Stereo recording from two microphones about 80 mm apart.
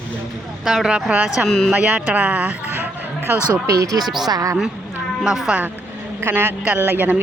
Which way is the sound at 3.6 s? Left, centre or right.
Right.